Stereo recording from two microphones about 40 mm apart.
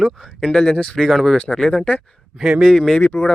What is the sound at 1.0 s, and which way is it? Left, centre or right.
Speech, centre.